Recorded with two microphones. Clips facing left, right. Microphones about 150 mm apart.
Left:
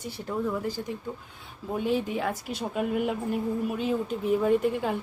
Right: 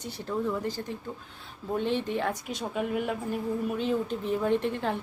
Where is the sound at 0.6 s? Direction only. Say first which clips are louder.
Left 1 dB; 10° left (ahead or behind).